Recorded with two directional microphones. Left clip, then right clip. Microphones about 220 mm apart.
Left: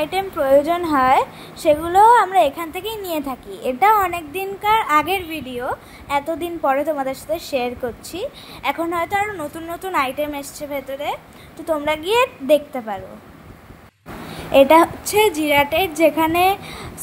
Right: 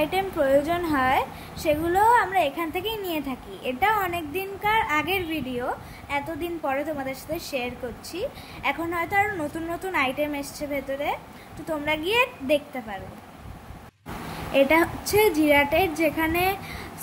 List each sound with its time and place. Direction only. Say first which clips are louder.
0.0 s a woman's voice: left 3 dB; 20° left (ahead or behind)
14.5 s a woman's voice: left 8 dB; 25° left (ahead or behind)